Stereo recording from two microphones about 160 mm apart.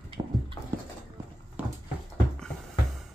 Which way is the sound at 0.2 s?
30° right (ahead or behind).